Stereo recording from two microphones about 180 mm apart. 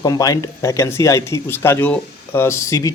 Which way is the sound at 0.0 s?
20° left (ahead or behind).